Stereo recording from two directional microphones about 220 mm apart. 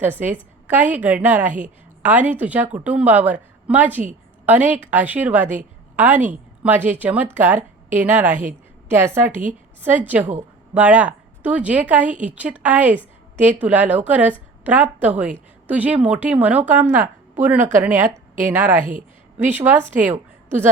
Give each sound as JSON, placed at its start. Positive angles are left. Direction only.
{"t": 0.0, "sound": "a woman's voice", "side_deg": -5}
{"t": 18.0, "sound": "a woman's voice", "side_deg": -35}
{"t": 19.4, "sound": "a woman's voice", "side_deg": -10}